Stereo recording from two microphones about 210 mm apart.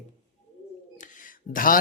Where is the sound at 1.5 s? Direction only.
40° left (ahead or behind).